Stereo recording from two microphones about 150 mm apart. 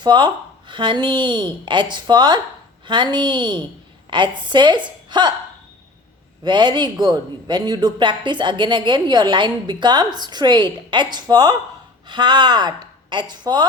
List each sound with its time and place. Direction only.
0.0 s a woman's voice: 30° right (ahead or behind)
6.4 s a man's voice: 30° right (ahead or behind)